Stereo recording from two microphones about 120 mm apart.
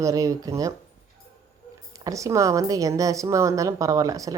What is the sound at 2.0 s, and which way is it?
A woman's voice, 25° right (ahead or behind).